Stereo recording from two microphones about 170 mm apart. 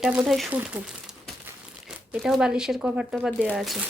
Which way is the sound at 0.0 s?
5° right (ahead or behind).